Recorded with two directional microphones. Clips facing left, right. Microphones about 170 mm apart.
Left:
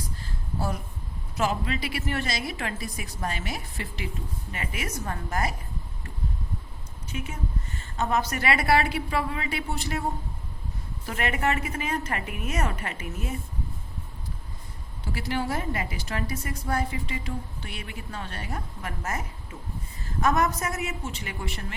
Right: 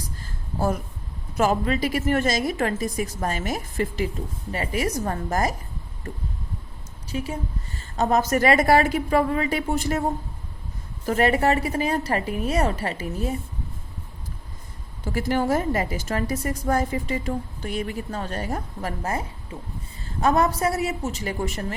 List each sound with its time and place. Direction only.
1.4 s a woman's voice: 45° right (ahead or behind)
7.1 s a woman's voice: 35° right (ahead or behind)
11.0 s a woman's voice: 40° right (ahead or behind)
15.0 s a woman's voice: 45° right (ahead or behind)